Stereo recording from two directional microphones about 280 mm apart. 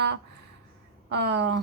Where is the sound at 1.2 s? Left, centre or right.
Right.